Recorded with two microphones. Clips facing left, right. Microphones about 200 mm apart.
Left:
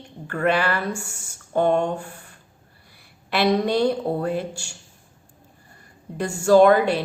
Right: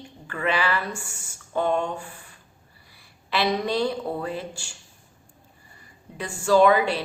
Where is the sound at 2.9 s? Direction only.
55° left (ahead or behind).